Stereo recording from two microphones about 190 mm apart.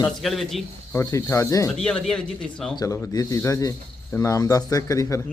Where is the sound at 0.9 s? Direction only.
15° left (ahead or behind).